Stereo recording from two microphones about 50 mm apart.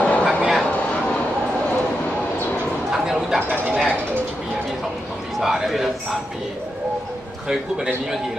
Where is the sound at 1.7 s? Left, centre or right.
Left.